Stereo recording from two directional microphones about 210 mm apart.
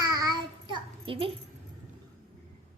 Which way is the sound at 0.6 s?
25° right (ahead or behind).